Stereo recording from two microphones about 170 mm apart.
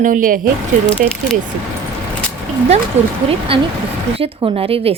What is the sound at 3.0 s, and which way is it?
Speech, 40° right (ahead or behind).